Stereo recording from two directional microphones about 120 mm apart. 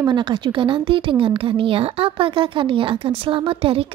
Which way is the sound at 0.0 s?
40° right (ahead or behind).